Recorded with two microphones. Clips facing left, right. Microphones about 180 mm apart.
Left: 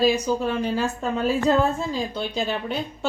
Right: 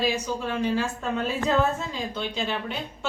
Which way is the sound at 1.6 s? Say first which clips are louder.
Left 3 dB; 35° left (ahead or behind).